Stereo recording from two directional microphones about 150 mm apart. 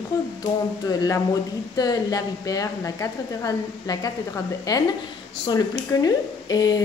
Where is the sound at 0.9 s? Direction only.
25° left (ahead or behind).